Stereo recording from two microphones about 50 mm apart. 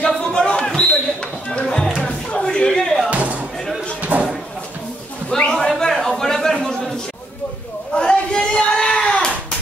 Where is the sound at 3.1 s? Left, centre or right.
Right.